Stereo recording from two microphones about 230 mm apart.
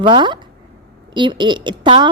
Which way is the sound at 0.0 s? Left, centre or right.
Right.